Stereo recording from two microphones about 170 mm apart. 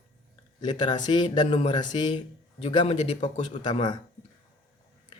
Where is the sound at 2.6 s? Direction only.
40° left (ahead or behind).